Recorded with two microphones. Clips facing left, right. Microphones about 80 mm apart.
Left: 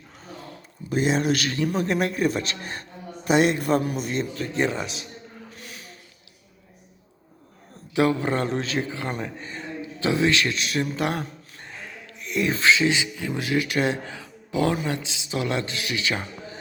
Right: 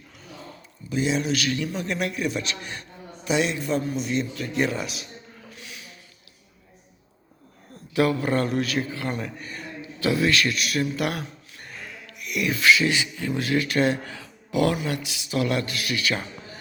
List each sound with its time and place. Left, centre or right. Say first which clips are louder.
0.9 s a man's voice: left 2 dB; left
4.0 s speech: even; left
5.5 s gasp: left 1 dB; left
7.9 s a man's voice: even; left